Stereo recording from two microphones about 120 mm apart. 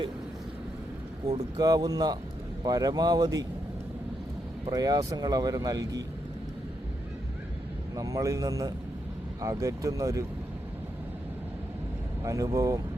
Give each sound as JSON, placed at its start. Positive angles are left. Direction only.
{"t": 1.5, "sound": "speech", "side_deg": -35}
{"t": 4.7, "sound": "speech", "side_deg": -30}
{"t": 7.9, "sound": "speech", "side_deg": -30}
{"t": 12.2, "sound": "speech", "side_deg": -30}